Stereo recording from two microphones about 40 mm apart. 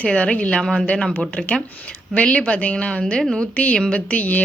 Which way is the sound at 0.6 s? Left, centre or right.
Centre.